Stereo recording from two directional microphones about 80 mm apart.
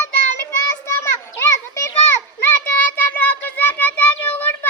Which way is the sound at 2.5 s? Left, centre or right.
Centre.